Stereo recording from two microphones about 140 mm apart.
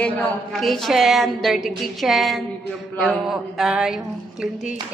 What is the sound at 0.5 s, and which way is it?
A woman's voice, centre (ahead or behind).